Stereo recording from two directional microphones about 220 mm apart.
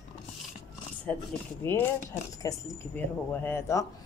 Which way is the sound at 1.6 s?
10° left (ahead or behind).